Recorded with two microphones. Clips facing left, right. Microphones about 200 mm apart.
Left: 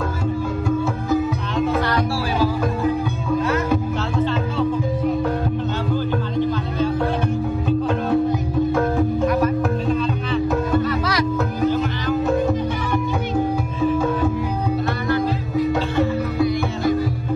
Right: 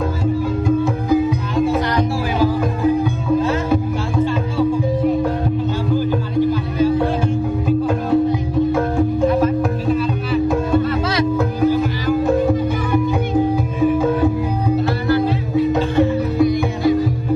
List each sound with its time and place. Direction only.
1.7 s music: 15° right (ahead or behind)
5.9 s music: 10° right (ahead or behind)
9.8 s music: 10° right (ahead or behind)
10.9 s music: 25° right (ahead or behind)
11.3 s music: 10° right (ahead or behind)
15.0 s music: 30° right (ahead or behind)
16.0 s music: 20° right (ahead or behind)